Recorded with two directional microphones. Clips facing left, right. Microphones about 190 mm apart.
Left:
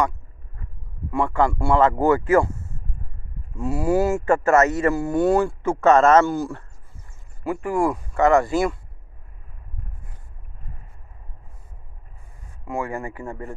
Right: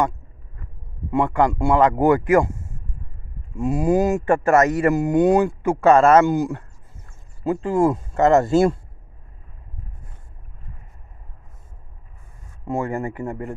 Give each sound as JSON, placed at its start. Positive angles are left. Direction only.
{"t": 1.1, "sound": "speech", "side_deg": -20}
{"t": 12.6, "sound": "speech", "side_deg": -20}